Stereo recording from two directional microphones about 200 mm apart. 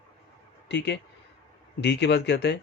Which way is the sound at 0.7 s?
60° left (ahead or behind).